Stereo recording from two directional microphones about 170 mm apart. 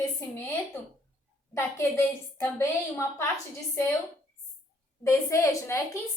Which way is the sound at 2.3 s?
15° left (ahead or behind).